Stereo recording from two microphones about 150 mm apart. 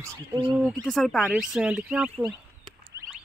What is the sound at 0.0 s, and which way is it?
Speech, 20° right (ahead or behind).